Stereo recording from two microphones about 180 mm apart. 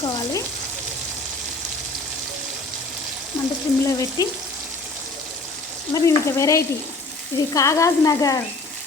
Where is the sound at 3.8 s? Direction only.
15° left (ahead or behind).